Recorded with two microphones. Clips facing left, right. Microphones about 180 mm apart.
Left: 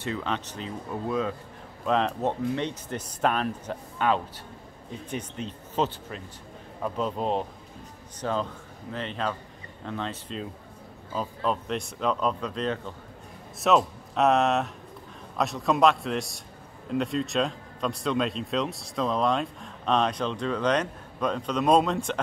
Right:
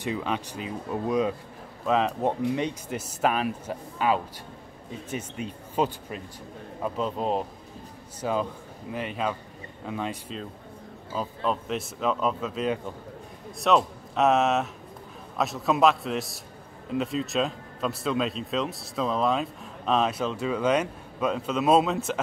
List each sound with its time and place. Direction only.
0.0 s speech: 10° right (ahead or behind)
1.9 s speech: 5° right (ahead or behind)
6.8 s speech: centre (ahead or behind)
13.6 s speech: centre (ahead or behind)